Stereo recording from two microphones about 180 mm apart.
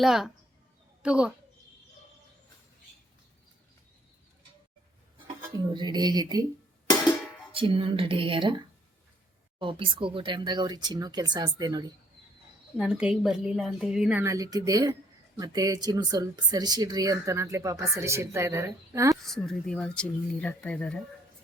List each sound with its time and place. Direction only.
0.0 s speech: centre (ahead or behind)
5.5 s speech: 25° right (ahead or behind)
7.5 s speech: 30° right (ahead or behind)
12.7 s speech: 5° right (ahead or behind)
19.2 s speech: centre (ahead or behind)